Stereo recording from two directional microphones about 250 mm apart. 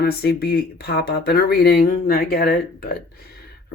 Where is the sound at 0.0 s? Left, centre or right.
Left.